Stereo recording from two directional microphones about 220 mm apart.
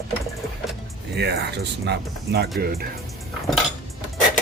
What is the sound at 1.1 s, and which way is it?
Mechanisms, 50° right (ahead or behind).